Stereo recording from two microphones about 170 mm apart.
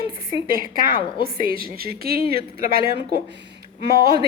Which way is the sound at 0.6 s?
55° right (ahead or behind).